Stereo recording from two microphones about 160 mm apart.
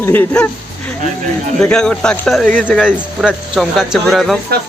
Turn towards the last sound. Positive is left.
turn(degrees=0)  # may be behind; listen again after turning